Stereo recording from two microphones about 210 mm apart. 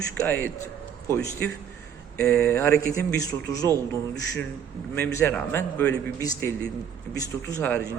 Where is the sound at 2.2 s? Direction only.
15° left (ahead or behind).